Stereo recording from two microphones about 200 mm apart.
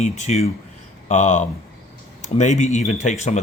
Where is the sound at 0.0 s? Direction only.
35° left (ahead or behind).